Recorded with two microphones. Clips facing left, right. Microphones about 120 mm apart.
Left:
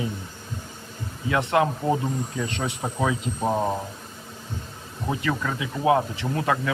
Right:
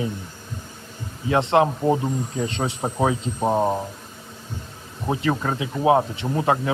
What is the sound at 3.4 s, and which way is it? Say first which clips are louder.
Speech: right 4 dB; 15° right (ahead or behind).